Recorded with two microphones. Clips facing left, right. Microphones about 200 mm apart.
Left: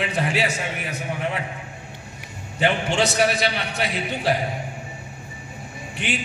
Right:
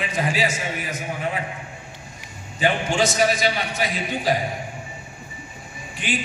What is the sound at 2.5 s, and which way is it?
A man's voice, 65° left (ahead or behind).